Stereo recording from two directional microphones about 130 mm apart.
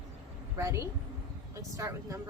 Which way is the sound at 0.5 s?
25° right (ahead or behind).